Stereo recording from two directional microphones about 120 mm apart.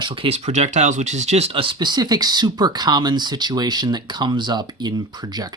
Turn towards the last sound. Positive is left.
turn(degrees=-35)  # may be behind; listen again after turning